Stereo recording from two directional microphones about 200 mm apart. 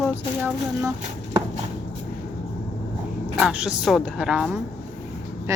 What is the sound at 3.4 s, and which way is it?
A woman's voice, 5° right (ahead or behind).